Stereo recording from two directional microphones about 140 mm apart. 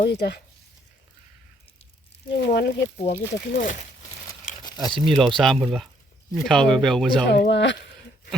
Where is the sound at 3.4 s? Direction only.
80° left.